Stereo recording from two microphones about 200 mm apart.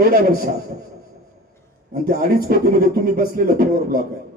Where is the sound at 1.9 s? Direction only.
45° right (ahead or behind).